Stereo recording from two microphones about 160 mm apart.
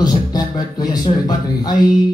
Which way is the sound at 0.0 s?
25° left (ahead or behind).